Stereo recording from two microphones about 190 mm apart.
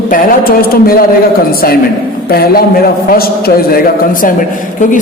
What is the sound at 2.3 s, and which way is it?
A man's voice, 55° left (ahead or behind).